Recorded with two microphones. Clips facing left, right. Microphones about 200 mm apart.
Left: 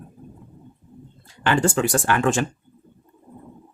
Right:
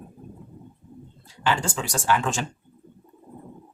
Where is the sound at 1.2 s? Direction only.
55° left (ahead or behind).